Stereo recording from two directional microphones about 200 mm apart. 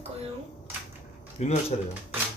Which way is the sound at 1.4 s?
30° left (ahead or behind).